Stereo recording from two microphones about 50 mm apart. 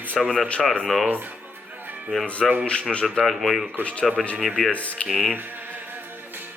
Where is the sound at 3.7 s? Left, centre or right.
Left.